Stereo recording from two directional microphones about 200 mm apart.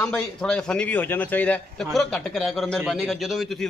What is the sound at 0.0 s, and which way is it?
A man's voice, 5° left (ahead or behind).